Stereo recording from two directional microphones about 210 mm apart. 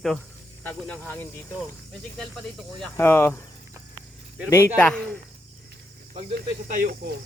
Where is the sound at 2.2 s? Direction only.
5° left (ahead or behind).